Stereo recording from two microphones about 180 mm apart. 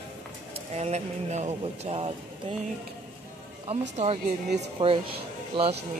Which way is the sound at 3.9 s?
35° right (ahead or behind).